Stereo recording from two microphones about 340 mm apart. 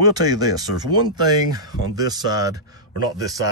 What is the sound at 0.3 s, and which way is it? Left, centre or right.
Speech, centre.